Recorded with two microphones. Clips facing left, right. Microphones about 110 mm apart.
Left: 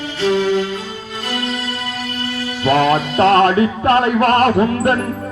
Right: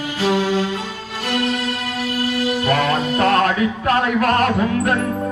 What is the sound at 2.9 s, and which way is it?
Music, 25° left (ahead or behind).